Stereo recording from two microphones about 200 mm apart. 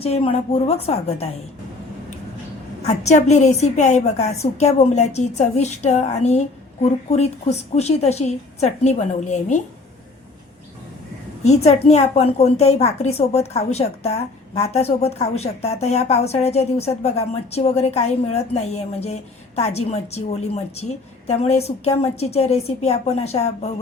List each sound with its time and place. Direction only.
0.0 s a woman's voice: 30° left (ahead or behind)
2.8 s a woman's voice: 35° left (ahead or behind)
11.4 s a woman's voice: 35° left (ahead or behind)